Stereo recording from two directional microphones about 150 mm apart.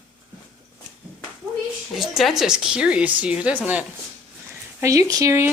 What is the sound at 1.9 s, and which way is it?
A woman's voice, centre (ahead or behind).